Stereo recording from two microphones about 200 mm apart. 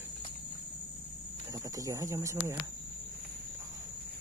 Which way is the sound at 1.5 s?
15° right (ahead or behind).